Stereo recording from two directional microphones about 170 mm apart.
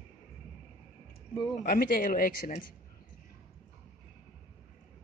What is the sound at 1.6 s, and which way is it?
Speech, 60° left (ahead or behind).